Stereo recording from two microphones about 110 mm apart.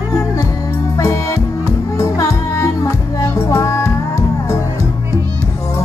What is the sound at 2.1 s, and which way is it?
Music, 25° left (ahead or behind).